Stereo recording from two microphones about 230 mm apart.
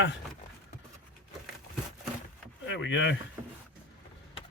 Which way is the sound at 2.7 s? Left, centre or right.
Left.